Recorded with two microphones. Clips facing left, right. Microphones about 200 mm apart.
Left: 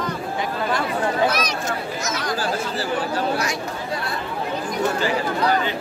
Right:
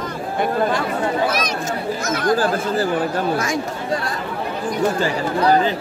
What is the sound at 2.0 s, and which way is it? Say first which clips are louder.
Speech: right 10 dB; 55° right (ahead or behind).